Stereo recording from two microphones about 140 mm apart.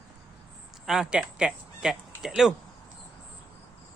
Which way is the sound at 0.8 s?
5° right (ahead or behind).